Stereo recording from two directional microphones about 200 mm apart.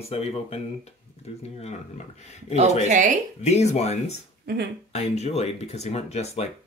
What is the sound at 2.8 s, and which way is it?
Speech, 40° right (ahead or behind).